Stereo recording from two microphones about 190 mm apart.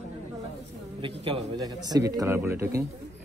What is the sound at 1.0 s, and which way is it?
A man's voice, 30° right (ahead or behind).